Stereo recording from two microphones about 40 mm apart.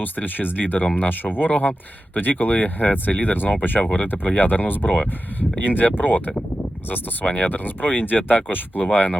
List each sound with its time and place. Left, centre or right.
0.0 s speech: left
3.8 s speech: left
4.0 s speech: left